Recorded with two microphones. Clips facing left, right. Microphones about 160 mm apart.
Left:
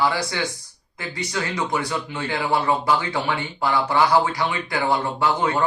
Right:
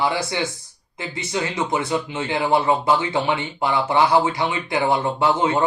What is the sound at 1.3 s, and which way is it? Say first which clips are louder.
Speech: right 2 dB; 20° right (ahead or behind).